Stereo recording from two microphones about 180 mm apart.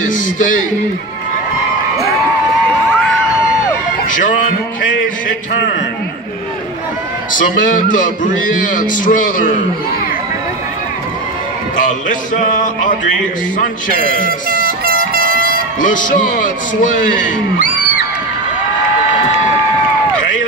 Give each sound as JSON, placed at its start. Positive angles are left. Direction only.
{"t": 0.1, "sound": "speech", "side_deg": 45}
{"t": 7.3, "sound": "speech", "side_deg": 45}
{"t": 12.1, "sound": "speech", "side_deg": 45}
{"t": 14.9, "sound": "air horn", "side_deg": -55}
{"t": 15.8, "sound": "speech", "side_deg": 45}